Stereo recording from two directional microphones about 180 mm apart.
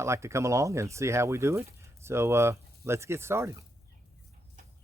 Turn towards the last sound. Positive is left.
turn(degrees=-15)  # may be behind; listen again after turning